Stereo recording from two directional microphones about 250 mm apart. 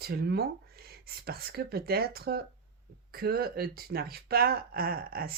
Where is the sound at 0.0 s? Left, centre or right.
Right.